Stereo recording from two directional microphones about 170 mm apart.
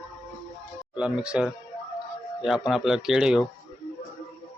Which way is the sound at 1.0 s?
5° right (ahead or behind).